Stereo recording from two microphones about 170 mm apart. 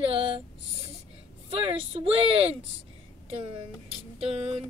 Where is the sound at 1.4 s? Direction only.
35° right (ahead or behind).